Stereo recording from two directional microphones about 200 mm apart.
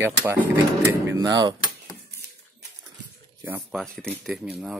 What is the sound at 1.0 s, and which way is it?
Cutlery, 20° right (ahead or behind).